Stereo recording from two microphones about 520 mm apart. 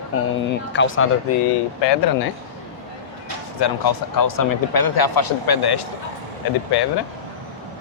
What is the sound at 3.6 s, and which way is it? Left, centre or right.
Speech, left.